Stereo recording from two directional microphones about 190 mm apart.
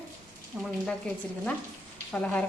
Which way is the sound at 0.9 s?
5° left (ahead or behind).